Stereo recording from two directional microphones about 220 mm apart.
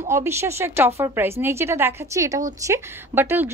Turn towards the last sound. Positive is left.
turn(degrees=-10)  # may be behind; listen again after turning